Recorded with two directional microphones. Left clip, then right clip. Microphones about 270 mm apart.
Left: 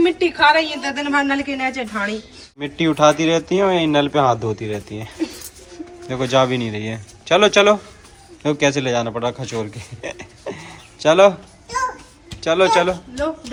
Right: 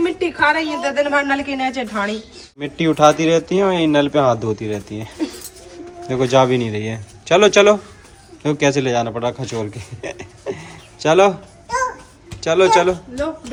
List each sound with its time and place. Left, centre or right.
0.0 s speech: centre
1.4 s a woman's voice: right
2.6 s a man's voice: centre
12.4 s a man's voice: centre